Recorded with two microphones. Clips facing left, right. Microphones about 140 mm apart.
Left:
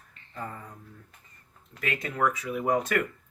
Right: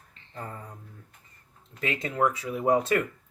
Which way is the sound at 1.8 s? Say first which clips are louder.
Right 2 dB; 25° right (ahead or behind).